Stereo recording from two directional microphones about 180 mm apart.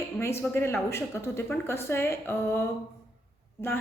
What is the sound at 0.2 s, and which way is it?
A woman's voice, 15° left (ahead or behind).